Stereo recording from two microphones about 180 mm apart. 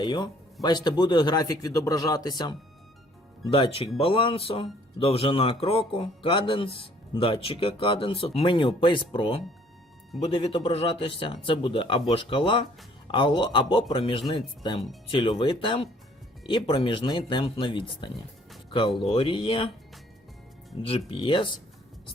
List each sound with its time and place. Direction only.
0.0 s a man's voice: 25° left (ahead or behind)
19.1 s a man's voice: 30° left (ahead or behind)
20.8 s a man's voice: 30° left (ahead or behind)